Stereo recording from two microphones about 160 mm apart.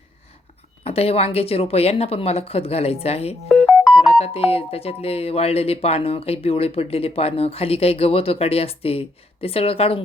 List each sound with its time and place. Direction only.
0.9 s speech: 40° left (ahead or behind)